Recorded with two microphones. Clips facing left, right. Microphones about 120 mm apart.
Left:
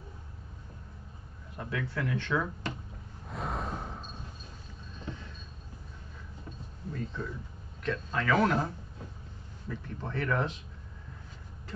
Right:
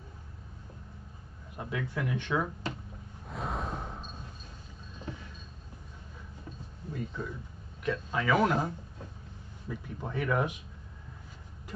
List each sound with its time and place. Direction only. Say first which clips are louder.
1.6 s speech: even; 15° right (ahead or behind)
3.3 s a sound: even; centre (ahead or behind)
6.9 s speech: even; 15° right (ahead or behind)